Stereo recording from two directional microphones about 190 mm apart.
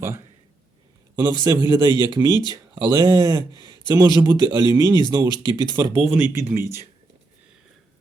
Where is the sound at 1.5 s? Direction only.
20° right (ahead or behind).